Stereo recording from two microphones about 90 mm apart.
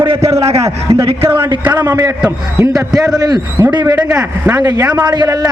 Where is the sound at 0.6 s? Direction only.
35° right (ahead or behind).